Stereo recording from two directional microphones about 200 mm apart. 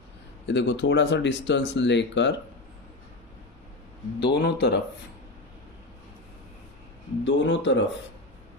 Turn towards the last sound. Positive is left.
turn(degrees=65)  # may be behind; listen again after turning